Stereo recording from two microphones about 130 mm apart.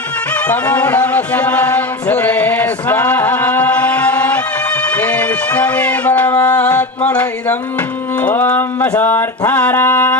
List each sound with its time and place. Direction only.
0.3 s chant: 10° left (ahead or behind)
4.9 s a sound: 10° left (ahead or behind)
8.2 s music: 15° left (ahead or behind)